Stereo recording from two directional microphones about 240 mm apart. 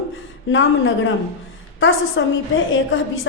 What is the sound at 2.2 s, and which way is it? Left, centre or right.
Speech, left.